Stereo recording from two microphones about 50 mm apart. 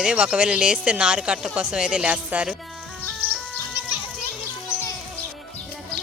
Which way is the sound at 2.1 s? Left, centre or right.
Right.